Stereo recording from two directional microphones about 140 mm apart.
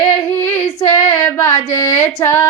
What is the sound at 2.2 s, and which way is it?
Speech, 20° left (ahead or behind).